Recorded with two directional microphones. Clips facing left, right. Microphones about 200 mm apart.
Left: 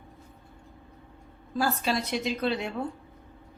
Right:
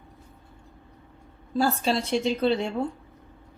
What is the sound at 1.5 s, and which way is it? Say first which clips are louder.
Speech: right 3 dB; 25° right (ahead or behind).